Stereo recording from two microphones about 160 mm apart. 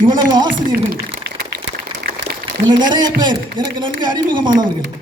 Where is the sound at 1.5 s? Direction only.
85° right.